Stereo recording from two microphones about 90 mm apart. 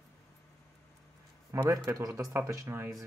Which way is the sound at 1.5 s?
35° right (ahead or behind).